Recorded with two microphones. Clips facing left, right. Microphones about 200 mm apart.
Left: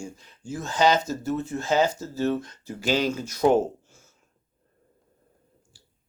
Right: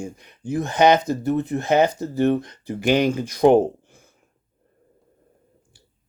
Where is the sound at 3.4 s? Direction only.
55° right (ahead or behind).